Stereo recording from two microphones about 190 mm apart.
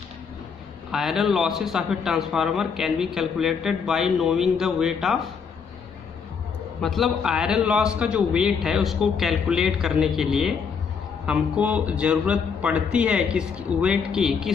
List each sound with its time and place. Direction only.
0.9 s a man's voice: centre (ahead or behind)
6.8 s a man's voice: centre (ahead or behind)